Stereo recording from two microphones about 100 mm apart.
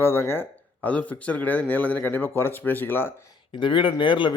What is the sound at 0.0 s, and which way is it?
Speech, 25° left (ahead or behind).